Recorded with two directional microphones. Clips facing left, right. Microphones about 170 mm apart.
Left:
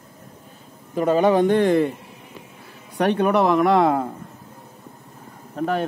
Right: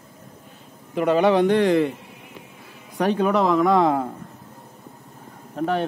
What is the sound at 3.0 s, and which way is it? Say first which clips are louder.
Speech: left 1 dB; 65° left (ahead or behind).